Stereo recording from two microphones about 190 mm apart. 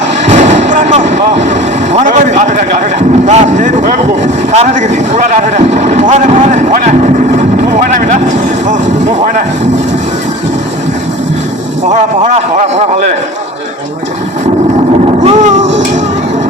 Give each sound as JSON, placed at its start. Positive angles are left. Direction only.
{"t": 0.3, "sound": "artillery fire", "side_deg": -35}
{"t": 1.9, "sound": "a sound", "side_deg": -40}
{"t": 3.2, "sound": "speech", "side_deg": -40}
{"t": 7.5, "sound": "vehicle", "side_deg": -45}
{"t": 8.6, "sound": "speech", "side_deg": -40}
{"t": 15.2, "sound": "a sound", "side_deg": -35}